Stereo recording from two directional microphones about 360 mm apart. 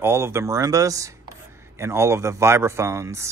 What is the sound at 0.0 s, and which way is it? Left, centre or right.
Speech, centre.